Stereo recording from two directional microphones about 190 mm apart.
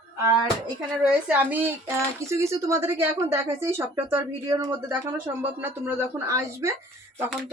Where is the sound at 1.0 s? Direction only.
10° right (ahead or behind).